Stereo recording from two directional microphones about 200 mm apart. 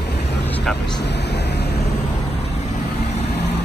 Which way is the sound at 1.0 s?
55° left (ahead or behind).